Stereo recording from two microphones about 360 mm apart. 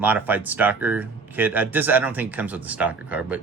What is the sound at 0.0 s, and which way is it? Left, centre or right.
Speech, centre.